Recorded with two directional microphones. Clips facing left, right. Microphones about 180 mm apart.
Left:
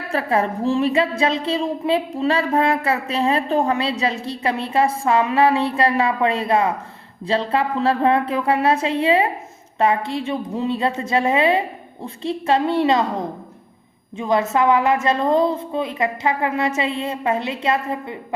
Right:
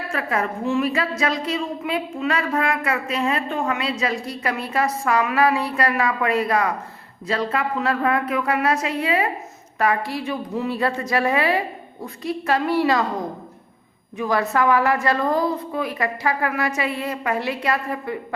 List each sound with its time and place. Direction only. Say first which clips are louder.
0.1 s a woman's voice: left 5 dB; 30° left (ahead or behind)
14.2 s a woman's voice: left 2 dB; 20° left (ahead or behind)